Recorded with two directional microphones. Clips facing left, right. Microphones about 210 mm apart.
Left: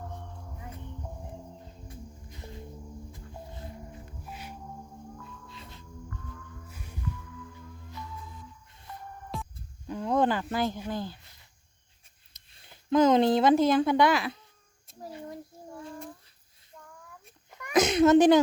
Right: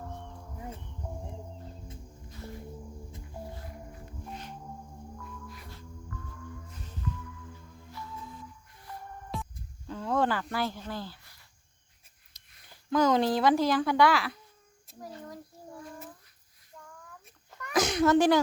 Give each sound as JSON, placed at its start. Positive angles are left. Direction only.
{"t": 2.3, "sound": "music", "side_deg": 20}
{"t": 4.3, "sound": "music", "side_deg": 10}
{"t": 5.5, "sound": "music", "side_deg": 25}
{"t": 6.7, "sound": "music", "side_deg": 10}
{"t": 8.7, "sound": "music", "side_deg": 25}
{"t": 9.3, "sound": "music", "side_deg": 0}
{"t": 9.8, "sound": "speech", "side_deg": 15}
{"t": 14.9, "sound": "a sound", "side_deg": 0}
{"t": 17.5, "sound": "a sound", "side_deg": 15}